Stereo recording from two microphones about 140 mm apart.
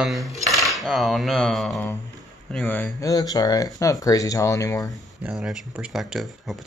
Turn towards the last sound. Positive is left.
turn(degrees=0)  # may be behind; listen again after turning